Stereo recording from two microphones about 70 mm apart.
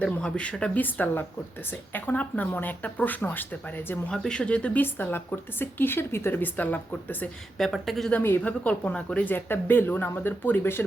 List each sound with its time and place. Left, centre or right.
0.0 s speech: centre
0.8 s a woman's voice: left
4.1 s speech: centre
4.8 s a woman's voice: left
7.6 s speech: centre
8.4 s a woman's voice: left